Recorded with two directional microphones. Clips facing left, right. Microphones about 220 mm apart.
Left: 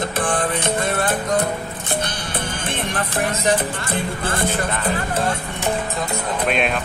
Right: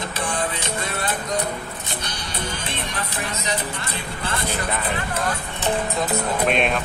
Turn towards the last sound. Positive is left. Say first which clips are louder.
# even
turn(degrees=0)  # may be behind; listen again after turning